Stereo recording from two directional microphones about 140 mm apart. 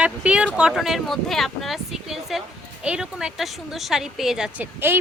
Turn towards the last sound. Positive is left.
turn(degrees=-15)  # may be behind; listen again after turning